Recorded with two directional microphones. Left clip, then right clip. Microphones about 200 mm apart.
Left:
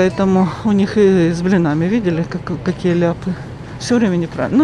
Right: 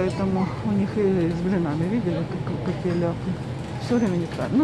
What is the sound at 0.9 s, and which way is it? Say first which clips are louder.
Speech: left 10 dB; 45° left (ahead or behind).